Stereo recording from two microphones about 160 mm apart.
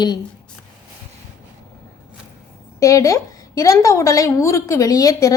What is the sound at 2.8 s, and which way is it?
A woman's voice, 20° left (ahead or behind).